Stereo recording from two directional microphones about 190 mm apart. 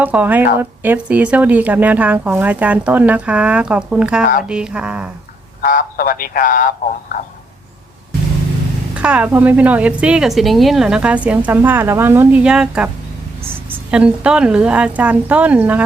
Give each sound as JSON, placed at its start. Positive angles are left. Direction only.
{"t": 0.0, "sound": "a woman's voice", "side_deg": -10}
{"t": 5.6, "sound": "speech", "side_deg": 45}
{"t": 9.0, "sound": "a woman's voice", "side_deg": -5}